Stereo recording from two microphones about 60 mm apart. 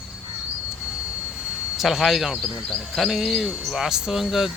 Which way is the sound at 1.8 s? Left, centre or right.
Centre.